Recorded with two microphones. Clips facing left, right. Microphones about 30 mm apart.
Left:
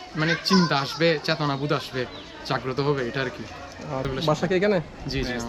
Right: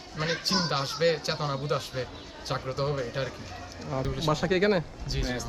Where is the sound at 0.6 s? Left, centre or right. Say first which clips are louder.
Left 4 dB; left.